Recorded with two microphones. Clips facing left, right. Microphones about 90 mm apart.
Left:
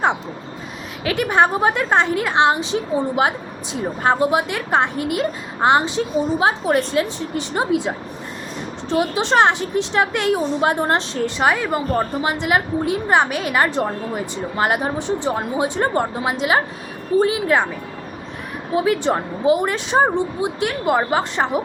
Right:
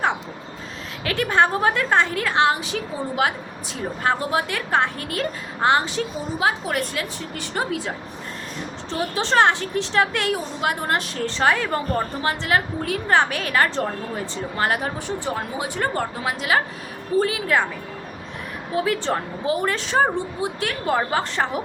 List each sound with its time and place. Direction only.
1.0 s a woman's voice: 15° left (ahead or behind)
11.3 s a woman's voice: 15° left (ahead or behind)
18.7 s a woman's voice: 20° left (ahead or behind)